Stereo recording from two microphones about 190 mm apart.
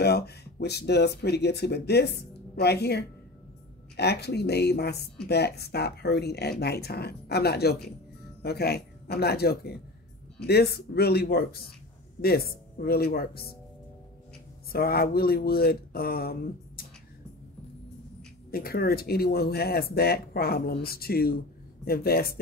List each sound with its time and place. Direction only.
0.0 s speech: 60° left (ahead or behind)
14.7 s speech: 55° left (ahead or behind)
18.5 s speech: 55° left (ahead or behind)